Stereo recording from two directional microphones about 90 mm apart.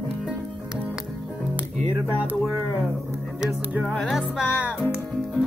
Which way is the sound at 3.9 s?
5° left (ahead or behind).